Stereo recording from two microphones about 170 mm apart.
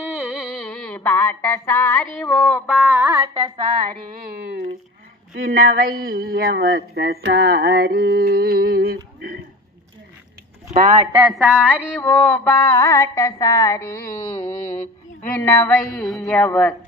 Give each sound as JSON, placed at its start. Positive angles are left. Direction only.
{"t": 0.0, "sound": "music", "side_deg": -5}
{"t": 2.1, "sound": "a sound", "side_deg": 5}
{"t": 5.3, "sound": "speech", "side_deg": -55}
{"t": 10.7, "sound": "speech", "side_deg": -45}
{"t": 11.1, "sound": "speech", "side_deg": -10}
{"t": 11.3, "sound": "mantra", "side_deg": 5}